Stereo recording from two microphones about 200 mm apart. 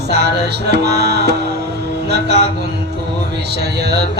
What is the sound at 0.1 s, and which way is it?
Music, 55° right (ahead or behind).